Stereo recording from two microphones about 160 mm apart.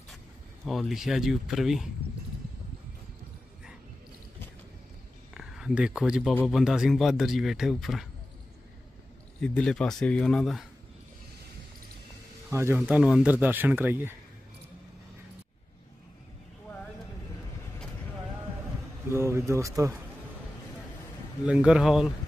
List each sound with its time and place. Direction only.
0.7 s speech: centre (ahead or behind)
5.3 s speech: 5° right (ahead or behind)
9.4 s speech: 5° left (ahead or behind)
12.4 s speech: 15° right (ahead or behind)
12.8 s speech: 5° right (ahead or behind)
19.1 s speech: 15° right (ahead or behind)
21.5 s speech: 5° right (ahead or behind)